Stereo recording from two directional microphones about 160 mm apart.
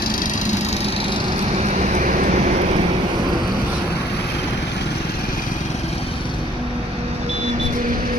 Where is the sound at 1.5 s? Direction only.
45° right (ahead or behind).